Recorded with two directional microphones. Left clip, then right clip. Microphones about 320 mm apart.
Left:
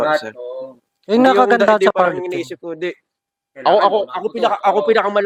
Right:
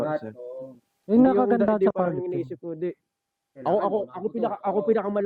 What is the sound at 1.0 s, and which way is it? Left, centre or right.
Speech, centre.